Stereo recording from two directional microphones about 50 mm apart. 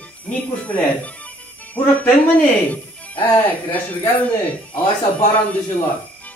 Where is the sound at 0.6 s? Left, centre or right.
Left.